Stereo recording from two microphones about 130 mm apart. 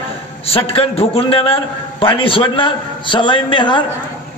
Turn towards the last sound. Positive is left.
turn(degrees=40)  # may be behind; listen again after turning